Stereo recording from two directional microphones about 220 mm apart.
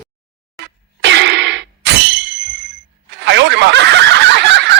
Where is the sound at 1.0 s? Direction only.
50° right (ahead or behind).